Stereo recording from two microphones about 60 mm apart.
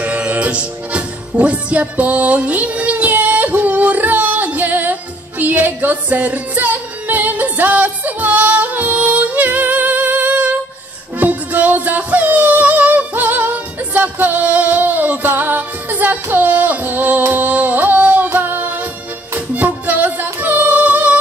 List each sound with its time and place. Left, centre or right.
0.0 s music: right